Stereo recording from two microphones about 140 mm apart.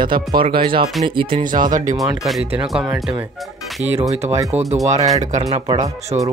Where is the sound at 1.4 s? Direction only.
70° right (ahead or behind).